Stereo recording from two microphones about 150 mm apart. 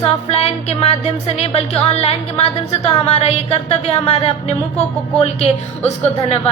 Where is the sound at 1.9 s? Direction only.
45° left (ahead or behind).